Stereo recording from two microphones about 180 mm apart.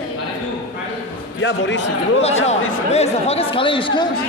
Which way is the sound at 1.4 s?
85° left.